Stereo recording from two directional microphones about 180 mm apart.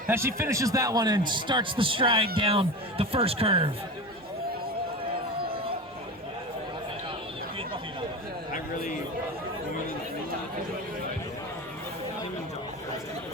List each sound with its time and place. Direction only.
0.1 s a man's voice: 15° right (ahead or behind); by 3.7 s 30° right (ahead or behind)